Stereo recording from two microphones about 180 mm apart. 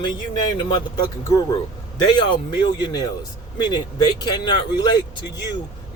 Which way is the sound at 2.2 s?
25° left (ahead or behind).